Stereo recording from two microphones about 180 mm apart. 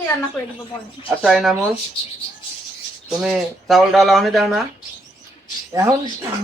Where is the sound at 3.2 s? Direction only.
5° right (ahead or behind).